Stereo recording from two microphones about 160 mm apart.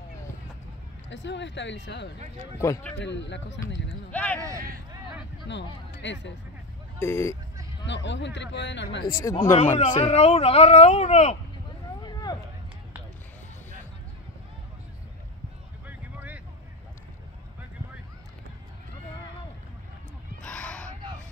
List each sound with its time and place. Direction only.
1.2 s speech: 90° left
2.6 s speech: 15° left (ahead or behind)
3.0 s speech: 90° left
4.1 s speech: 10° left (ahead or behind)
5.5 s speech: 90° left
7.0 s speech: 20° left (ahead or behind)
7.8 s speech: 90° left
9.2 s speech: 30° left (ahead or behind); by 11.3 s 45° left (ahead or behind)
12.0 s a sound: 25° left (ahead or behind)
15.9 s vehicle: 10° right (ahead or behind)
20.4 s a sound: 5° left (ahead or behind)